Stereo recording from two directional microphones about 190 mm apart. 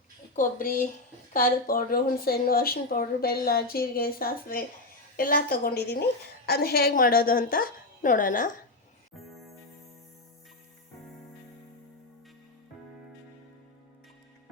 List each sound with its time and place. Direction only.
0.3 s a woman's voice: 45° left (ahead or behind)